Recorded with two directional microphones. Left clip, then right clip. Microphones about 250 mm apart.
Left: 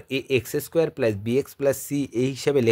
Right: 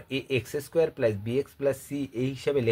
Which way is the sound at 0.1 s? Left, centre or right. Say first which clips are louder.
Left 5 dB; left.